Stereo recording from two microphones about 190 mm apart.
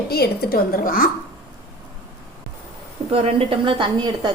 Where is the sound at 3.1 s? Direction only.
30° right (ahead or behind).